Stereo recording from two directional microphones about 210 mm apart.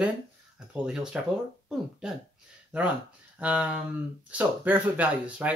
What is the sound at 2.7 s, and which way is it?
Speech, 5° right (ahead or behind).